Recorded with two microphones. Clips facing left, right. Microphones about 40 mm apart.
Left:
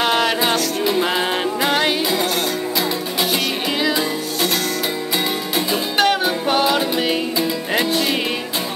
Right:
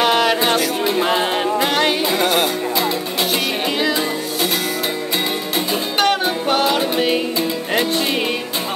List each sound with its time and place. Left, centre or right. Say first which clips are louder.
0.0 s music: right 2 dB; centre
1.0 s music: right 2 dB; centre
2.1 s music: right 3 dB; right
2.4 s music: right 2 dB; centre
5.7 s music: even; centre